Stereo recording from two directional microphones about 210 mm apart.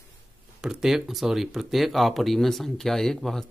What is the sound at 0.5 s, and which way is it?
Speech, centre (ahead or behind).